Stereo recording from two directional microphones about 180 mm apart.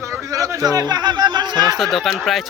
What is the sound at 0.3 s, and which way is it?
Speech, 20° right (ahead or behind).